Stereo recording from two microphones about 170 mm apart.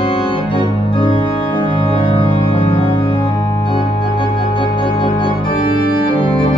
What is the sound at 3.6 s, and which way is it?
Music, 30° left (ahead or behind).